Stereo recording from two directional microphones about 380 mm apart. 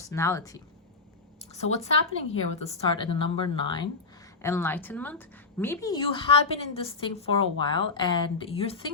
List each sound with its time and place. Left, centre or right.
0.0 s a woman's voice: centre